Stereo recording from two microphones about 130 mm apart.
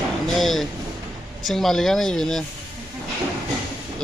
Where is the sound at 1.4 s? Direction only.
Centre (ahead or behind).